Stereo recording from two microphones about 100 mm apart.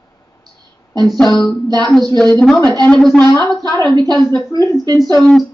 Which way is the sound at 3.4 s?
35° right (ahead or behind).